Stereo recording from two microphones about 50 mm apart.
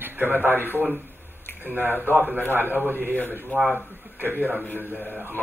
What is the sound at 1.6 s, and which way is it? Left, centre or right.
Speech, right.